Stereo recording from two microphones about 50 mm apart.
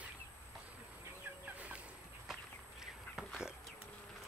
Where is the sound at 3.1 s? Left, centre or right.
Centre.